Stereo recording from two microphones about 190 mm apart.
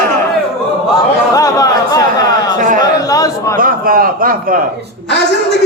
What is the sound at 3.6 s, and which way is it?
A man's voice, 50° right (ahead or behind).